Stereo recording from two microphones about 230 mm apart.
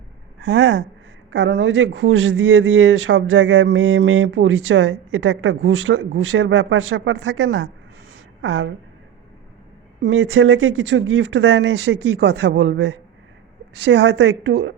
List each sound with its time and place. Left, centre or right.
0.4 s a woman's voice: right
10.0 s speech: right